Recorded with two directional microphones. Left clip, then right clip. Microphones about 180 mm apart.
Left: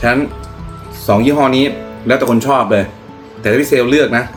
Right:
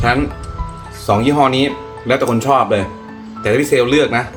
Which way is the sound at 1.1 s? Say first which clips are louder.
Left 2 dB; 15° left (ahead or behind).